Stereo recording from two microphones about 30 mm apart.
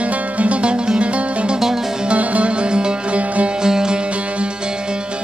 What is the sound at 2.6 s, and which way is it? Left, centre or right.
Music, right.